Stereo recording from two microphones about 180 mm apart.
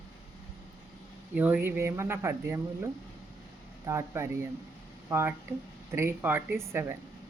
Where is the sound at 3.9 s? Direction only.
15° right (ahead or behind).